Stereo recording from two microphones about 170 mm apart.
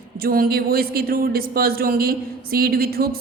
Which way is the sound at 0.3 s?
60° right (ahead or behind).